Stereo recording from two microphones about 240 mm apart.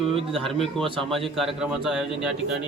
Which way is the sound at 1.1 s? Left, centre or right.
Centre.